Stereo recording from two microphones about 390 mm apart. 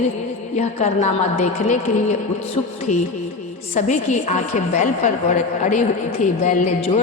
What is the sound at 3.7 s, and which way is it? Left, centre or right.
A woman's voice, centre.